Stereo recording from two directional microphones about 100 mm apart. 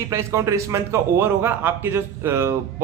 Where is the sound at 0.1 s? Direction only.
30° right (ahead or behind).